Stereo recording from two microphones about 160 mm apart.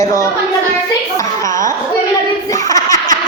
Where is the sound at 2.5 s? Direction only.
20° left (ahead or behind).